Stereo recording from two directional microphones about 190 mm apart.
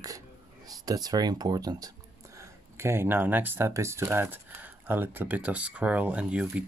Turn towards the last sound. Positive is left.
turn(degrees=-5)  # may be behind; listen again after turning